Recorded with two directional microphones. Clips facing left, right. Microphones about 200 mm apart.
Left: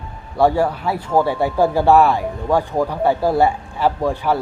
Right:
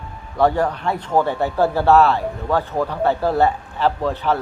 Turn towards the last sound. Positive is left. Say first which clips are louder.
# left 2 dB
turn(degrees=10)  # may be behind; listen again after turning